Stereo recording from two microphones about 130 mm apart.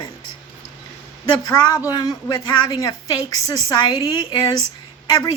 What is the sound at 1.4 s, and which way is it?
A woman's voice, 30° left (ahead or behind).